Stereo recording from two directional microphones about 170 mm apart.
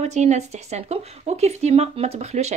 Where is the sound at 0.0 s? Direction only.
40° right (ahead or behind).